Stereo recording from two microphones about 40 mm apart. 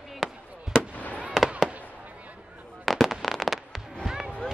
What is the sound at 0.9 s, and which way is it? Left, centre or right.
Fireworks, left.